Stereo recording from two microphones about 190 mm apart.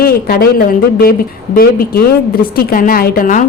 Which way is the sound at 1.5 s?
50° left (ahead or behind).